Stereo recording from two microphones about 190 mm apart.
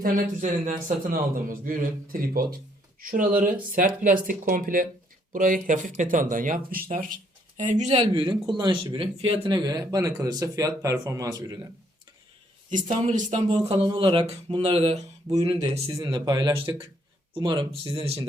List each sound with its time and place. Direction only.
0.0 s a man's voice: 40° right (ahead or behind); by 11.5 s 20° right (ahead or behind)
12.7 s speech: 40° right (ahead or behind)
13.5 s speech: 25° right (ahead or behind)
15.7 s speech: 20° right (ahead or behind)